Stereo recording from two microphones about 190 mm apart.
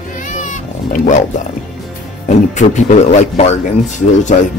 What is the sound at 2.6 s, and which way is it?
Speech, 40° left (ahead or behind).